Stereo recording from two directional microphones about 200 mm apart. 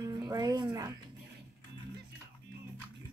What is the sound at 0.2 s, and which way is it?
Music, 20° right (ahead or behind).